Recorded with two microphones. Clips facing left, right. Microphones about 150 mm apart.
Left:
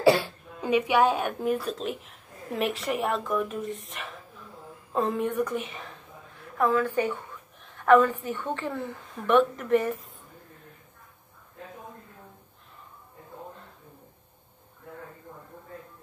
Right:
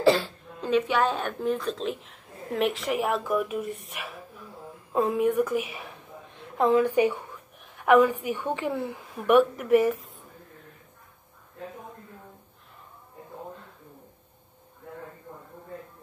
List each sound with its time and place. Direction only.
0.0 s speech: 10° left (ahead or behind); by 5.9 s 10° right (ahead or behind)
6.3 s a woman's voice: 20° right (ahead or behind); by 10.1 s 5° right (ahead or behind)